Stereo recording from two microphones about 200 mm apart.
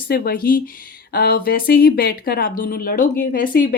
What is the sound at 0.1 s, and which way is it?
Speech, 50° left (ahead or behind).